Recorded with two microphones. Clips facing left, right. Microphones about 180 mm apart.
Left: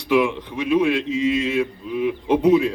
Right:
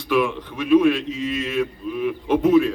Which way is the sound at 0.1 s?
15° left (ahead or behind).